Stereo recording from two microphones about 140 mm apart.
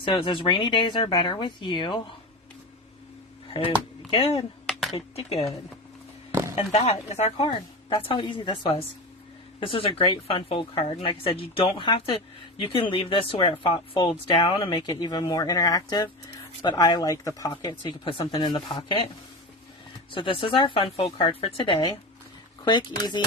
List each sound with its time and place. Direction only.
0.0 s speech: 35° left (ahead or behind)
4.1 s speech: 40° left (ahead or behind)
6.6 s speech: 45° left (ahead or behind)
14.4 s speech: 30° left (ahead or behind)
20.1 s speech: 40° left (ahead or behind)